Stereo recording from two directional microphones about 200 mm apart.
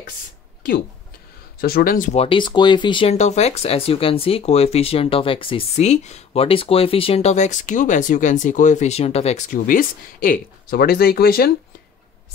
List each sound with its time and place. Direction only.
1.6 s speech: 50° left (ahead or behind)
2.1 s speech: 25° left (ahead or behind); by 11.5 s 50° left (ahead or behind)